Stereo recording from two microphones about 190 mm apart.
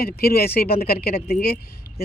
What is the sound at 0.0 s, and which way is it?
Speech, 55° left (ahead or behind).